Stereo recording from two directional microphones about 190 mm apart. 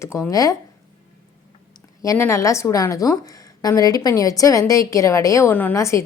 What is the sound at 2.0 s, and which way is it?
A woman's voice, 15° left (ahead or behind).